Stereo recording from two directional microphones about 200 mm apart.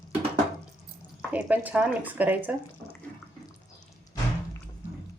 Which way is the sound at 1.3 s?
10° right (ahead or behind).